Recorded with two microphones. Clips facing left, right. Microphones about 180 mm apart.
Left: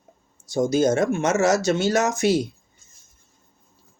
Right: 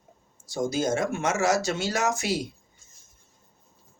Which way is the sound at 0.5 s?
20° left (ahead or behind).